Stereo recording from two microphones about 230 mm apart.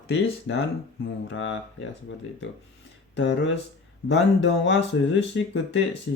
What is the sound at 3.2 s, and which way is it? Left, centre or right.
Speech, left.